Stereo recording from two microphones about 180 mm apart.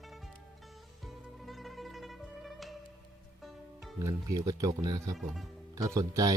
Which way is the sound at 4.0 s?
20° right (ahead or behind).